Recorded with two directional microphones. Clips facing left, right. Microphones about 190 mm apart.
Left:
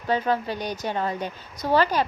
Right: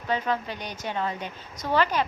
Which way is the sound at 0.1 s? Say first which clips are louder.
Left 4 dB; 35° left (ahead or behind).